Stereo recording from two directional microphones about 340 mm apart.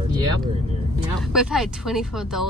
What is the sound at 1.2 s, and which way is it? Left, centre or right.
Speech, centre.